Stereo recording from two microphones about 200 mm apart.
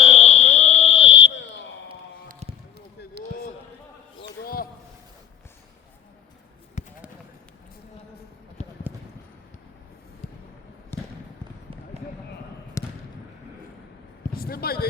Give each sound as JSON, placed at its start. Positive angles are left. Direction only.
{"t": 0.0, "sound": "fire alarm", "side_deg": 30}
{"t": 1.4, "sound": "fire alarm", "side_deg": 65}
{"t": 2.2, "sound": "a sound", "side_deg": -35}
{"t": 4.4, "sound": "basketball bounce", "side_deg": 50}
{"t": 6.8, "sound": "basketball bounce", "side_deg": 35}
{"t": 8.6, "sound": "clip-clop", "side_deg": 35}
{"t": 10.9, "sound": "trickle", "side_deg": 10}
{"t": 12.8, "sound": "a sound", "side_deg": 15}
{"t": 14.3, "sound": "a sound", "side_deg": 50}